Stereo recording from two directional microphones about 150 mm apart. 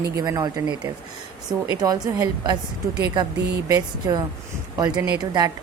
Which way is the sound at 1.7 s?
25° right (ahead or behind).